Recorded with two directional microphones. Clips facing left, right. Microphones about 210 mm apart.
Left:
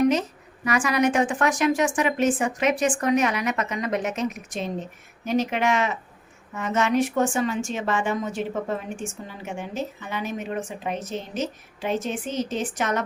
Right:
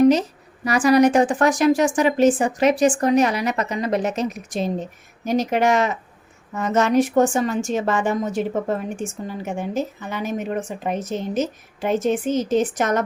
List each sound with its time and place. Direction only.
0.0 s a woman's voice: 35° right (ahead or behind)